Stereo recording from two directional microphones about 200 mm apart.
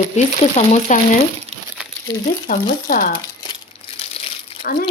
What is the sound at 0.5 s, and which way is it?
Speech, 35° left (ahead or behind).